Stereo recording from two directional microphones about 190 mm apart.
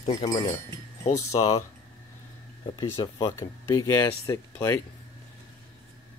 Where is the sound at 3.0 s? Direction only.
25° left (ahead or behind).